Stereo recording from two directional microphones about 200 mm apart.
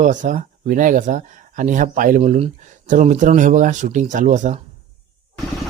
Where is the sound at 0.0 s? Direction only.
40° right (ahead or behind).